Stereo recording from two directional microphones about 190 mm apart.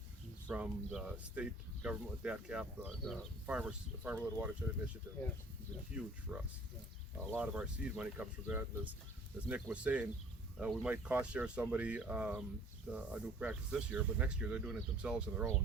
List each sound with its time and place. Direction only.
0.5 s speech: 5° right (ahead or behind)
3.0 s speech: 5° left (ahead or behind)
3.4 s speech: 5° right (ahead or behind)
6.3 s speech: 10° right (ahead or behind)